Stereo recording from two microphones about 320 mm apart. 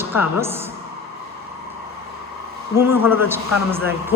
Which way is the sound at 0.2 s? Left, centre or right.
Centre.